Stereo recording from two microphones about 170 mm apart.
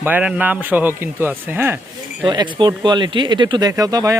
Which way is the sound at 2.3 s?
25° right (ahead or behind).